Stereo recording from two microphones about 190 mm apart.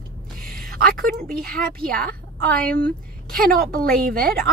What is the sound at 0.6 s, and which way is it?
A woman's voice, centre (ahead or behind).